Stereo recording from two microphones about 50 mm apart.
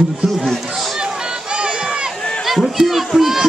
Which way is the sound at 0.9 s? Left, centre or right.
Centre.